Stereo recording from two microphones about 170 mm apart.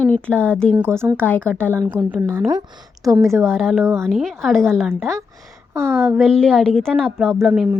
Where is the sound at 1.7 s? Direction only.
20° right (ahead or behind).